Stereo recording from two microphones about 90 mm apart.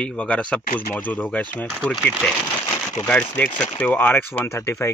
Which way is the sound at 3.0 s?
20° left (ahead or behind).